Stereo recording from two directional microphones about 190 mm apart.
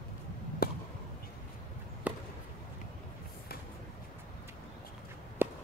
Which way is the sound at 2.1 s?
10° right (ahead or behind).